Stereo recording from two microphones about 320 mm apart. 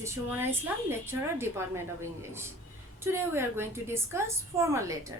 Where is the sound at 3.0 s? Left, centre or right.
Centre.